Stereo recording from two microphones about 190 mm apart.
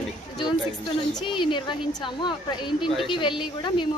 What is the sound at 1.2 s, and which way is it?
Speech, 25° left (ahead or behind).